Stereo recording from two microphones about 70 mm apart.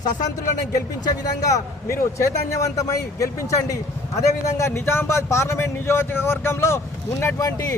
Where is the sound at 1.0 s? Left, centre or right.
Left.